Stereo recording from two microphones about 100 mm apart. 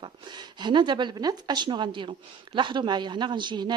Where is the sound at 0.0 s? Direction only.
50° right (ahead or behind).